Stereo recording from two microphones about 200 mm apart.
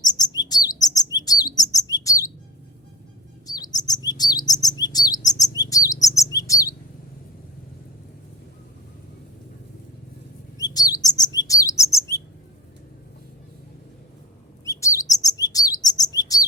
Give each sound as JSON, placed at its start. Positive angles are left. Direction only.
{"t": 0.0, "sound": "chirp", "side_deg": 20}
{"t": 3.4, "sound": "chirp", "side_deg": 20}
{"t": 10.6, "sound": "chirp", "side_deg": 20}
{"t": 14.6, "sound": "chirp", "side_deg": 15}